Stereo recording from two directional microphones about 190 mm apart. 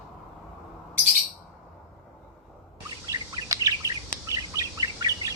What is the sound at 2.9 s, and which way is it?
Bird vocalization, 20° right (ahead or behind).